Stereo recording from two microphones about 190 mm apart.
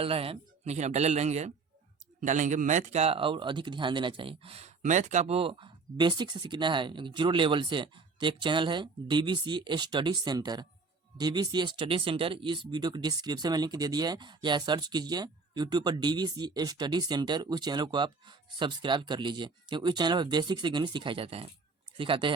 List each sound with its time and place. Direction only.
0.0 s a man's voice: 30° right (ahead or behind)